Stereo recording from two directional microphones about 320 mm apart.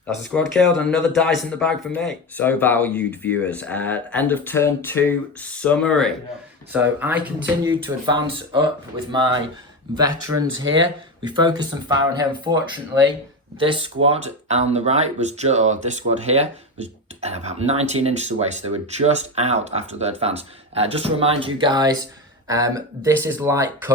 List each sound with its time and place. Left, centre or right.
0.3 s speech: centre
10.3 s speech: right
11.2 s speech: centre